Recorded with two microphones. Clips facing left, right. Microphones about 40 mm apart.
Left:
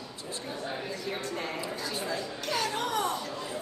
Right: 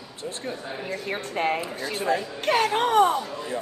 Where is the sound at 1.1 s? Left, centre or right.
Right.